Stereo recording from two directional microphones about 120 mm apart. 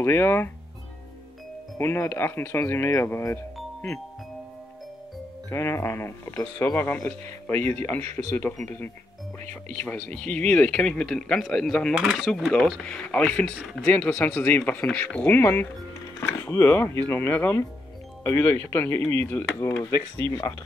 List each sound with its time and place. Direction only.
0.0 s speech: 20° left (ahead or behind)
1.8 s speech: 20° left (ahead or behind)
5.5 s speech: 20° left (ahead or behind); by 11.9 s 5° left (ahead or behind)
11.9 s speech: 10° right (ahead or behind)
12.3 s speech: 5° left (ahead or behind); by 20.5 s 25° left (ahead or behind)